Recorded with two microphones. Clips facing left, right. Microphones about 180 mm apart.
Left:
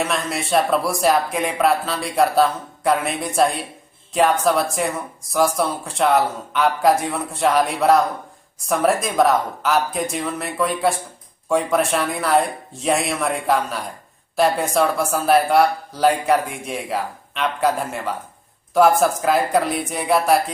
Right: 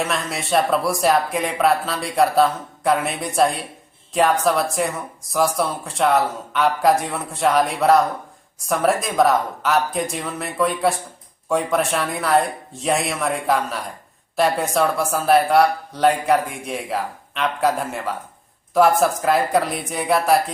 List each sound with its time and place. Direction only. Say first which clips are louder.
0.0 s speech: left 1 dB; centre (ahead or behind)